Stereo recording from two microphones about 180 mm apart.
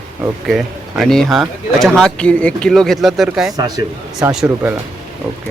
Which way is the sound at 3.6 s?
20° right (ahead or behind).